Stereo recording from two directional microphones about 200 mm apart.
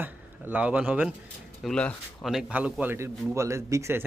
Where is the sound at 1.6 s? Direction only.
5° left (ahead or behind).